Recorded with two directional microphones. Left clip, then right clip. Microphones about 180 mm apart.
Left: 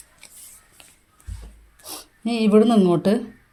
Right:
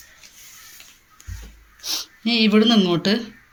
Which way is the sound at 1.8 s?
55° left (ahead or behind).